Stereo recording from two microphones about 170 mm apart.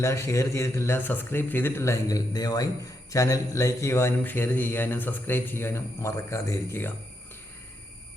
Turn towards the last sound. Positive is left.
turn(degrees=15)  # may be behind; listen again after turning